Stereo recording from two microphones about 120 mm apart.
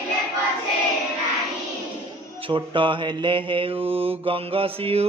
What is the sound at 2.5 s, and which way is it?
Mantra, 45° right (ahead or behind).